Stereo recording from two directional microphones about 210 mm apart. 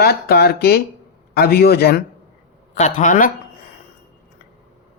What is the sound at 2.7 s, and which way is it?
Speech, 35° left (ahead or behind).